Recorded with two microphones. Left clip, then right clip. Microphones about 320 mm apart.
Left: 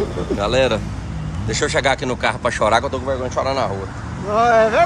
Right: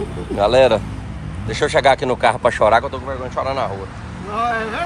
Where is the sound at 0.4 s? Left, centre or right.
Centre.